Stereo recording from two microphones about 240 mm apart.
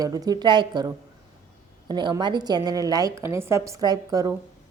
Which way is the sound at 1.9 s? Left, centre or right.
Centre.